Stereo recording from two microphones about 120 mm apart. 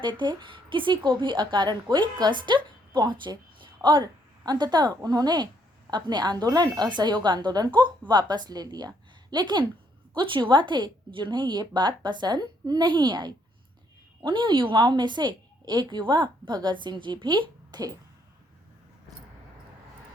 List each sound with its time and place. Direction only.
0.0 s a woman's voice: 40° right (ahead or behind)